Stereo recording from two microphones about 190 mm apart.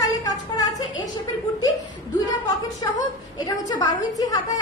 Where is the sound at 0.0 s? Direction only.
20° left (ahead or behind).